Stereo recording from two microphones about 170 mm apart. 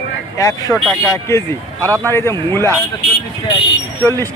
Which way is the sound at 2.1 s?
15° left (ahead or behind).